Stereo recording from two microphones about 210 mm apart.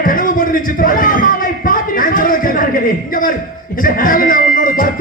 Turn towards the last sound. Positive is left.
turn(degrees=40)  # may be behind; listen again after turning